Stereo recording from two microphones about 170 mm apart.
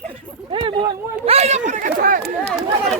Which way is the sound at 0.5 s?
30° right (ahead or behind).